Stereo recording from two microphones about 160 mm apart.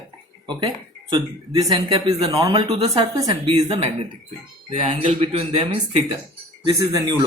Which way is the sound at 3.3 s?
35° right (ahead or behind).